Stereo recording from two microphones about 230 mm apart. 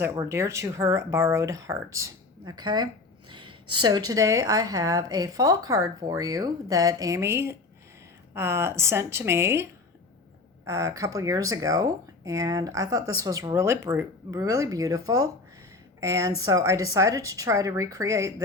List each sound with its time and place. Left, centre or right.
0.0 s speech: centre
10.7 s a woman's voice: centre